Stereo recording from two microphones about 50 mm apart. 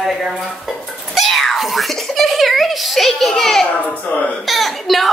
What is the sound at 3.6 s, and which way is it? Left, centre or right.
Speech, left.